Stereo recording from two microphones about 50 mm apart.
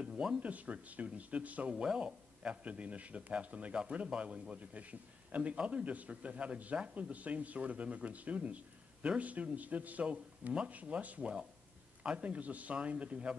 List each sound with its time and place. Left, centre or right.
0.0 s a sound: centre
0.4 s speech: right
1.7 s a man's voice: centre